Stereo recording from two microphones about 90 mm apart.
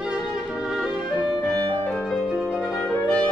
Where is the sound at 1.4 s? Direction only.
15° left (ahead or behind).